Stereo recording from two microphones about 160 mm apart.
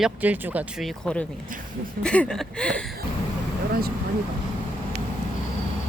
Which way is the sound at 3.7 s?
70° right (ahead or behind).